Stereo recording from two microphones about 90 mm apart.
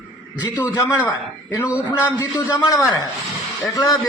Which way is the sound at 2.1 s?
40° left (ahead or behind).